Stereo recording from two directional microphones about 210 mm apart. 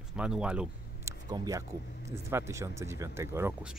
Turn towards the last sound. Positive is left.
turn(degrees=-10)  # may be behind; listen again after turning